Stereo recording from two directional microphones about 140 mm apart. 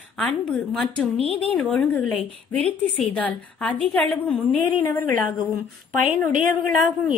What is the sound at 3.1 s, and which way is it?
Speech, 10° left (ahead or behind).